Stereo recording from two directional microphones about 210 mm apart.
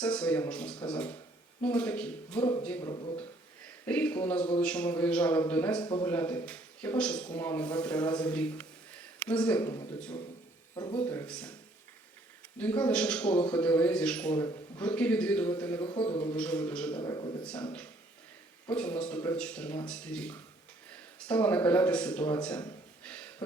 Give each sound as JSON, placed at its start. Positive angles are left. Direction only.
{"t": 0.0, "sound": "speech", "side_deg": 5}
{"t": 2.8, "sound": "a man's voice", "side_deg": 20}
{"t": 3.8, "sound": "speech", "side_deg": 5}
{"t": 5.8, "sound": "a man's voice", "side_deg": 20}
{"t": 6.1, "sound": "speech", "side_deg": 5}
{"t": 12.5, "sound": "speech", "side_deg": 5}
{"t": 15.9, "sound": "a man's voice", "side_deg": 25}
{"t": 16.3, "sound": "speech", "side_deg": 5}
{"t": 16.9, "sound": "a man's voice", "side_deg": 20}
{"t": 18.7, "sound": "speech", "side_deg": 5}
{"t": 23.0, "sound": "a sound", "side_deg": 5}